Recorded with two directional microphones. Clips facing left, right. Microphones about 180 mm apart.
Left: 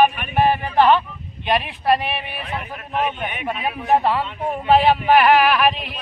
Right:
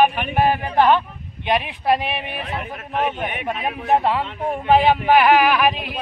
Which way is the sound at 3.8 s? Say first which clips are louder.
Left 1 dB; 15° right (ahead or behind).